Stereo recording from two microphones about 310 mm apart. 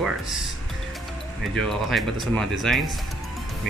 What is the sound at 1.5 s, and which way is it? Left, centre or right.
Speech, centre.